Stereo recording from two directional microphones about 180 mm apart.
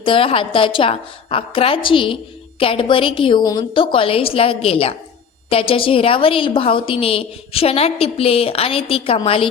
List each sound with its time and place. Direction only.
0.0 s a woman's voice: 30° left (ahead or behind)